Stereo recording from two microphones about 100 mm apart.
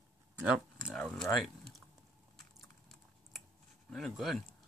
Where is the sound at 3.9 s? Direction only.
Centre (ahead or behind).